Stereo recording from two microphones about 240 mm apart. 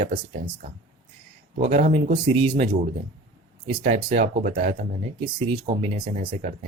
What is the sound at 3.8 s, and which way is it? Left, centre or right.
Speech, right.